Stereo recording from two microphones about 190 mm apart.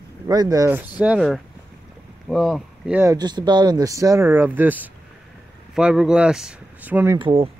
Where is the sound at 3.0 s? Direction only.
20° right (ahead or behind).